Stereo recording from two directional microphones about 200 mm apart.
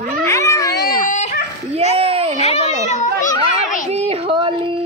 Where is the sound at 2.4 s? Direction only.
35° left (ahead or behind).